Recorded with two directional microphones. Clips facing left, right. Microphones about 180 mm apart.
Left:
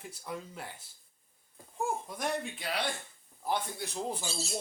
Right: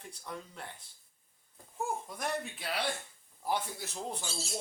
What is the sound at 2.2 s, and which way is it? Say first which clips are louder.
Speech: left 2 dB; centre (ahead or behind).